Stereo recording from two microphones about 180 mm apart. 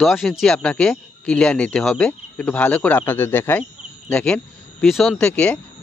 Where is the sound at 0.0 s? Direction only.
Centre (ahead or behind).